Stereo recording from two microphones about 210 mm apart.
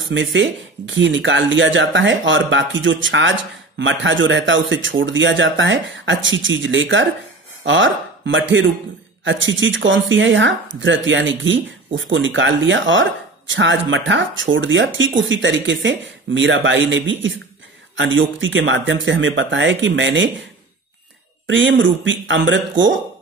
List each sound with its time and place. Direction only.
0.1 s a man's voice: 60° right (ahead or behind)
21.5 s speech: 60° right (ahead or behind)